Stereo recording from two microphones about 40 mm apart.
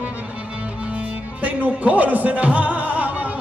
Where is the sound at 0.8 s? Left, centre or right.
Right.